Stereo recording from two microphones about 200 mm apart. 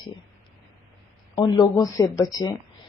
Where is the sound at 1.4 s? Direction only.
20° left (ahead or behind).